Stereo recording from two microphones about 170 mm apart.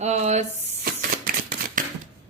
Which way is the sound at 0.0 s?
40° right (ahead or behind).